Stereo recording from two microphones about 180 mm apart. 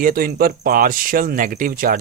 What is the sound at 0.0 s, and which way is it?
Speech, 55° right (ahead or behind).